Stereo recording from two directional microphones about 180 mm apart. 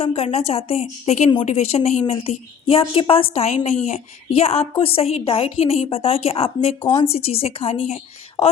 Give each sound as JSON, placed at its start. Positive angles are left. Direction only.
{"t": 0.0, "sound": "a woman's voice", "side_deg": 35}